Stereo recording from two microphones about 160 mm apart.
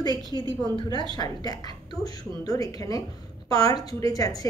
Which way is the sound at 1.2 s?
25° left (ahead or behind).